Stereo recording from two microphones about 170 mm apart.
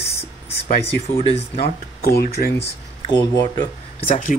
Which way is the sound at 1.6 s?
65° left (ahead or behind).